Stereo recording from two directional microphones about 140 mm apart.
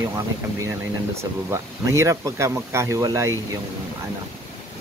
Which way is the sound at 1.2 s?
20° right (ahead or behind).